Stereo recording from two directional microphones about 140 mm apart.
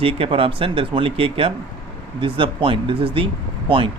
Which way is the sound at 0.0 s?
40° right (ahead or behind).